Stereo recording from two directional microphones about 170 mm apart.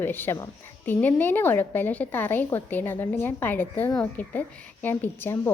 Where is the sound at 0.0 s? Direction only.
10° left (ahead or behind).